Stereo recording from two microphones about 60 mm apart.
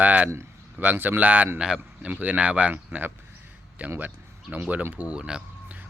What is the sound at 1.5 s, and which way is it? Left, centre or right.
Speech, centre.